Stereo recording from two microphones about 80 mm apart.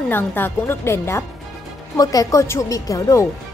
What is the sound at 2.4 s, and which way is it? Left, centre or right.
Speech, left.